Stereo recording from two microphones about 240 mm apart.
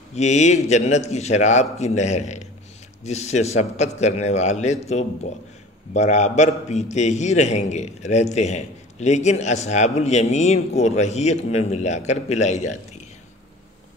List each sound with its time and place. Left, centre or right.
0.1 s a man's voice: left